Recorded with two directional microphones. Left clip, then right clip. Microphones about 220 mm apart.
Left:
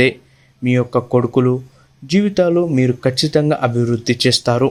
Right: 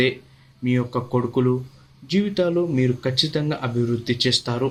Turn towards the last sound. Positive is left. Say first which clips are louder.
# left 7 dB
turn(degrees=40)  # may be behind; listen again after turning